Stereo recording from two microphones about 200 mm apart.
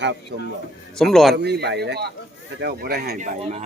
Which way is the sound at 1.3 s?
55° right (ahead or behind).